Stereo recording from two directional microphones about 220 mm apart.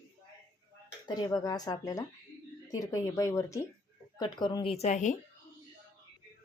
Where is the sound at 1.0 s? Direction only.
15° left (ahead or behind); by 5.1 s 30° left (ahead or behind).